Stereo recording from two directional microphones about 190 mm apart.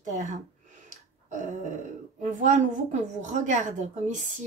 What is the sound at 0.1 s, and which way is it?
Speech, 40° right (ahead or behind).